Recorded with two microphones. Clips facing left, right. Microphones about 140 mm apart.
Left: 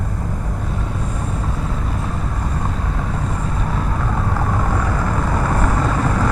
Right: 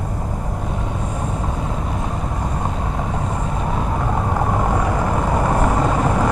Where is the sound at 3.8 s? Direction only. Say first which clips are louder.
Right 2 dB; 25° right (ahead or behind).